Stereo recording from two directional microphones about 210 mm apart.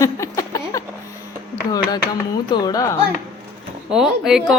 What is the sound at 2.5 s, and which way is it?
Speech, 20° left (ahead or behind).